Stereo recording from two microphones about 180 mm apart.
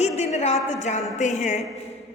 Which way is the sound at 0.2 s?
40° left (ahead or behind).